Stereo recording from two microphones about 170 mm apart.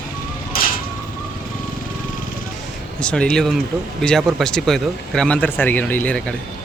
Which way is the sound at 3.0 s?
5° left (ahead or behind).